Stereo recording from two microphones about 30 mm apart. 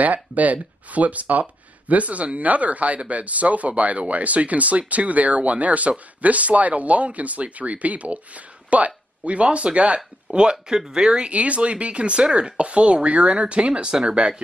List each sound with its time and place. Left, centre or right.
0.0 s speech: right
9.9 s speech: right
11.3 s speech: right